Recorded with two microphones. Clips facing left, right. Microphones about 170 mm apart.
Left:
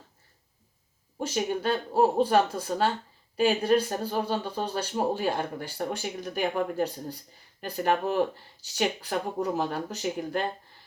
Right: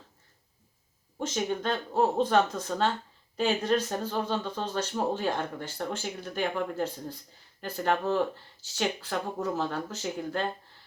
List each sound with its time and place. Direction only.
1.2 s speech: 10° left (ahead or behind)